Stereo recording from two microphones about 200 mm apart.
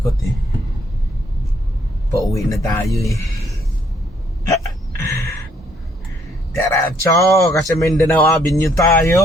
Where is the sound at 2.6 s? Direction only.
15° left (ahead or behind).